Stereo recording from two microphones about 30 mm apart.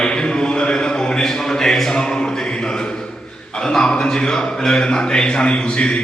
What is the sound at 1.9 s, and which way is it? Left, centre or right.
A man's voice, left.